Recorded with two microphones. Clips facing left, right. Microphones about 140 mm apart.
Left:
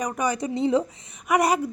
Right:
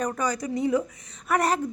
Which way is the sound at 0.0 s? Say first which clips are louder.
Left 2 dB; 15° left (ahead or behind).